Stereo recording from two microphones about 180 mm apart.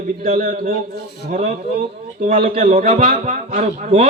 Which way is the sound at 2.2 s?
50° right (ahead or behind).